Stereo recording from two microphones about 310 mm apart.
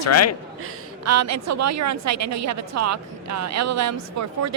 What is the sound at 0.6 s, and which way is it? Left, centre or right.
A woman's voice, right.